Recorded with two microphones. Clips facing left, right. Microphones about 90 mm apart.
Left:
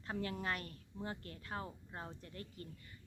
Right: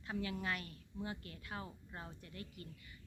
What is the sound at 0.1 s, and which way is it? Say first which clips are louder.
Speech: even; 40° left (ahead or behind).